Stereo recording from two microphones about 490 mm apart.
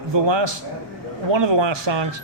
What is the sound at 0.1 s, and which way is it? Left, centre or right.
A man's voice, right.